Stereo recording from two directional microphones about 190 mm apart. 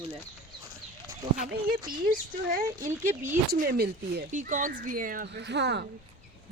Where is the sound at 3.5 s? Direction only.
50° right (ahead or behind).